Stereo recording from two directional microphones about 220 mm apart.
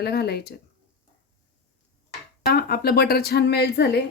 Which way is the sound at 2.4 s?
45° left (ahead or behind).